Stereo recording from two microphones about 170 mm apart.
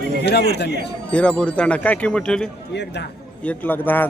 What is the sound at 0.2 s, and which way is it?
Speech, 75° left (ahead or behind).